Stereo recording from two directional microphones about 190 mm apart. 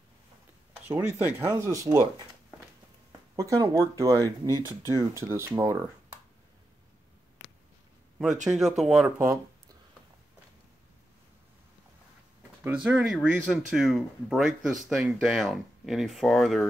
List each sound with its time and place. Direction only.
0.8 s speech: 10° right (ahead or behind)
8.5 s speech: centre (ahead or behind)
12.6 s speech: 5° right (ahead or behind)